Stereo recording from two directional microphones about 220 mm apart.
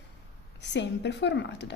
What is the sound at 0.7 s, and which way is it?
A woman's voice, 50° left (ahead or behind).